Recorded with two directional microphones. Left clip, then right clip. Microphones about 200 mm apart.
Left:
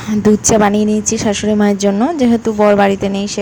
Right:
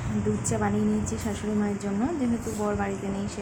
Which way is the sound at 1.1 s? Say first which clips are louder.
Left 16 dB; 40° left (ahead or behind).